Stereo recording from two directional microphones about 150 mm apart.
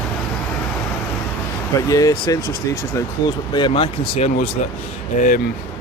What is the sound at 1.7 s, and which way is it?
Speech, 25° left (ahead or behind).